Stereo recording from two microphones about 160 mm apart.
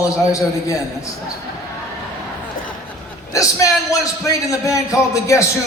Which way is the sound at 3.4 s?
20° left (ahead or behind).